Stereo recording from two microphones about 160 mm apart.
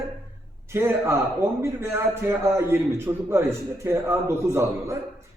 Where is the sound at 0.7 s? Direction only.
15° right (ahead or behind).